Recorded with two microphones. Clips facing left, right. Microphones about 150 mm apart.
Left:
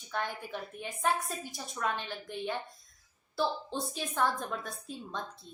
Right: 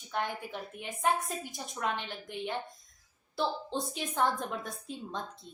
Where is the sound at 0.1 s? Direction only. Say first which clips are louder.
Right 1 dB; 15° right (ahead or behind).